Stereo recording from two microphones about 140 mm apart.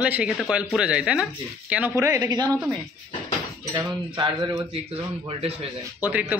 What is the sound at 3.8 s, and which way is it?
Speech, 30° right (ahead or behind).